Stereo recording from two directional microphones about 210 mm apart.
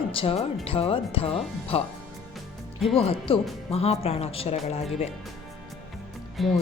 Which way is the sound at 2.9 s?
25° left (ahead or behind).